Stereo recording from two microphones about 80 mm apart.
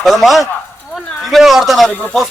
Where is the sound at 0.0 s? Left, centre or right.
Centre.